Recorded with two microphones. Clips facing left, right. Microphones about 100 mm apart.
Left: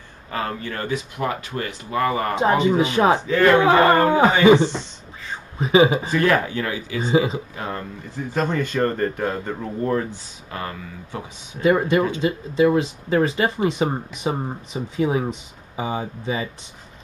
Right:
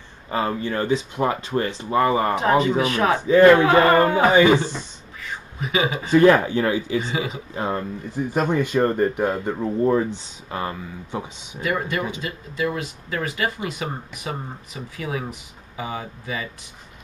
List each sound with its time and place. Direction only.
0.3 s speech: 20° right (ahead or behind)
2.8 s speech: 20° left (ahead or behind)
4.5 s a sound: 20° left (ahead or behind)
6.1 s speech: 20° right (ahead or behind)
7.0 s speech: 30° left (ahead or behind)
7.5 s speech: 25° right (ahead or behind)
11.6 s speech: 25° left (ahead or behind)